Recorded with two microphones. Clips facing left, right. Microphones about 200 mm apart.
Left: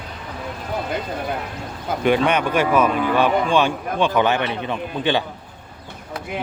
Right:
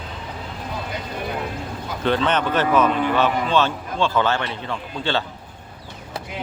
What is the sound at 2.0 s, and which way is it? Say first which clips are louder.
Speech: left 2 dB; 10° left (ahead or behind).